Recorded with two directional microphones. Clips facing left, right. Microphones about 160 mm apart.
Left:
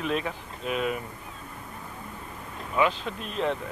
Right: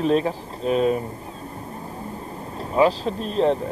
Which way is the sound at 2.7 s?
35° right (ahead or behind).